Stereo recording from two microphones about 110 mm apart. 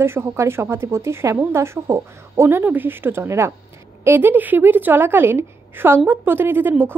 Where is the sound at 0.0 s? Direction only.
25° right (ahead or behind).